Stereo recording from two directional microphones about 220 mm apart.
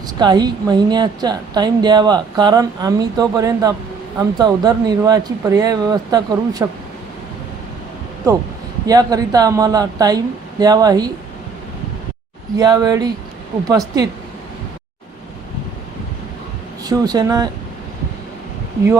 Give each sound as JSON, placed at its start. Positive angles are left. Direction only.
{"t": 0.2, "sound": "a woman's voice", "side_deg": -20}
{"t": 8.9, "sound": "speech", "side_deg": -15}
{"t": 12.5, "sound": "speech", "side_deg": -15}
{"t": 16.8, "sound": "speech", "side_deg": -15}